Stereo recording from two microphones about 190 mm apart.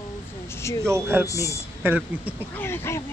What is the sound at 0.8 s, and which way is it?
Speech, 15° right (ahead or behind).